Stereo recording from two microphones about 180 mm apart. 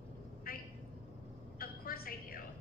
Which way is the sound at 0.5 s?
55° left (ahead or behind).